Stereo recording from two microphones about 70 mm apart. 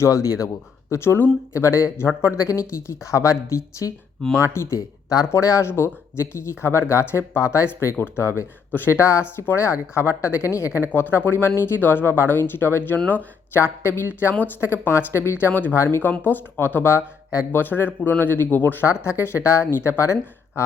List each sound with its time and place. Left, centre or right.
0.0 s speech: left
2.5 s speech: left
7.9 s speech: left
10.9 s speech: left
15.8 s speech: left
19.0 s speech: left